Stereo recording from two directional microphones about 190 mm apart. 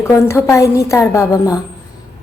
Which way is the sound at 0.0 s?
15° left (ahead or behind).